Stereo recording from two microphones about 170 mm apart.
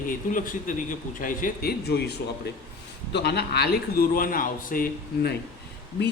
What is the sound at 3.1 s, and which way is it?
Speech, 80° left.